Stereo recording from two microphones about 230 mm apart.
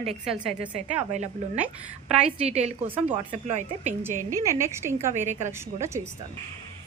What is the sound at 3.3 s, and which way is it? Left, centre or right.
Speech, right.